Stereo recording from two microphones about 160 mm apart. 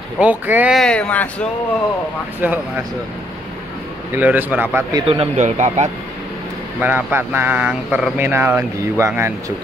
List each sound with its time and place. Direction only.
0.2 s speech: 10° right (ahead or behind)
0.7 s speech: 5° left (ahead or behind)
2.4 s speech: 10° right (ahead or behind)
4.1 s speech: 10° right (ahead or behind)
5.0 s a man's voice: 35° right (ahead or behind)
6.8 s speech: 10° right (ahead or behind)